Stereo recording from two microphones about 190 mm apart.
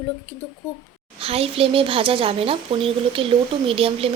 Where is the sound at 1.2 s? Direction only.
30° right (ahead or behind).